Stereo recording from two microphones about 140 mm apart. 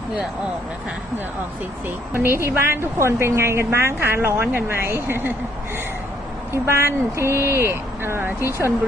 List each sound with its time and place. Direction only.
2.1 s a woman's voice: 15° right (ahead or behind)
6.5 s speech: 20° right (ahead or behind)